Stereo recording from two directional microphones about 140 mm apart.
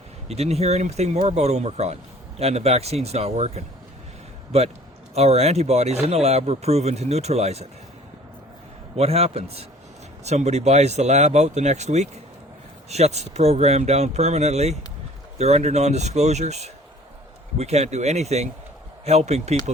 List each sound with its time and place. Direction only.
0.3 s speech: 50° right (ahead or behind)
5.1 s speech: 50° right (ahead or behind)
9.0 s speech: 45° right (ahead or behind)